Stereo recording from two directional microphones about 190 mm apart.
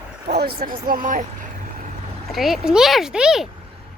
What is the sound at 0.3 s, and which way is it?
Speech, 60° right (ahead or behind).